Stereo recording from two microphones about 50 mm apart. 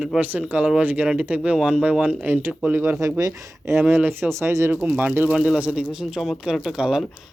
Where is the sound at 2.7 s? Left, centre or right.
Right.